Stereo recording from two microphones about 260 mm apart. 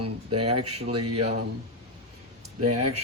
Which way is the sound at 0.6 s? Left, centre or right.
Right.